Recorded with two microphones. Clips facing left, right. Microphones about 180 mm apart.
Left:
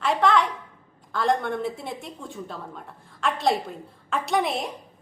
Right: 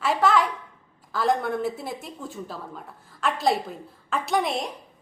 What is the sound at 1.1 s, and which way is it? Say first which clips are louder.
A woman's voice: even; centre (ahead or behind).